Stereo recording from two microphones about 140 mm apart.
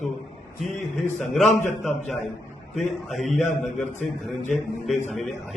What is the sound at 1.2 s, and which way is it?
Speech, centre (ahead or behind).